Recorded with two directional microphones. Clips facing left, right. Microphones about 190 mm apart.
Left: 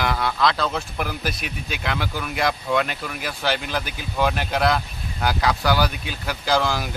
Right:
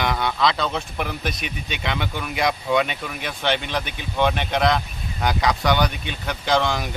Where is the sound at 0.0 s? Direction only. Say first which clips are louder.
Even; centre (ahead or behind).